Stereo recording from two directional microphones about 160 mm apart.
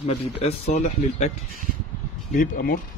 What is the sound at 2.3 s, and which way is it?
Speech, 60° left (ahead or behind).